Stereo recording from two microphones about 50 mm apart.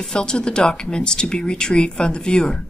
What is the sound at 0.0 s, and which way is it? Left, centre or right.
A woman's voice, centre.